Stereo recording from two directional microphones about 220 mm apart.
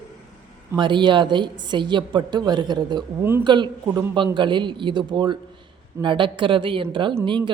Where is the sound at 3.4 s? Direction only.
20° right (ahead or behind).